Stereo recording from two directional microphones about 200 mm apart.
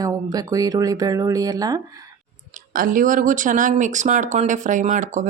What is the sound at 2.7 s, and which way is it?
Speech, 45° right (ahead or behind).